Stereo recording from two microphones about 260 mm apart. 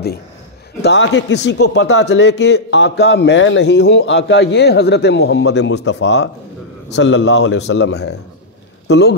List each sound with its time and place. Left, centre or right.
0.8 s a man's voice: left